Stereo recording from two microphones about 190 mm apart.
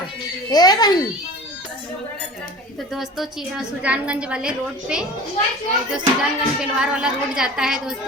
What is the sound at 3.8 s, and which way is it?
A woman's voice, 5° right (ahead or behind).